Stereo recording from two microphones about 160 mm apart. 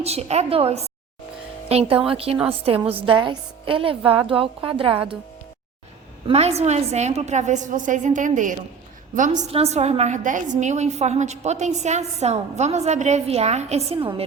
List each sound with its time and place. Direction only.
0.0 s a woman's voice: 40° right (ahead or behind)
6.2 s a woman's voice: 40° right (ahead or behind)